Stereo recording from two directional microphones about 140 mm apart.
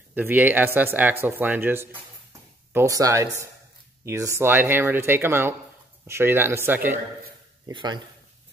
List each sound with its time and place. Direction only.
0.1 s speech: 15° right (ahead or behind)
7.7 s speech: 30° right (ahead or behind)